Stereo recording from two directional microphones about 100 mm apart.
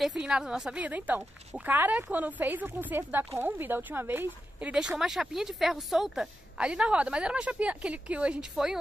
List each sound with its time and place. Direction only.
0.0 s speech: 5° right (ahead or behind)